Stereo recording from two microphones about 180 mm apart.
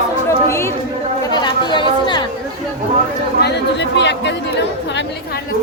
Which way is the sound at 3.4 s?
75° left (ahead or behind).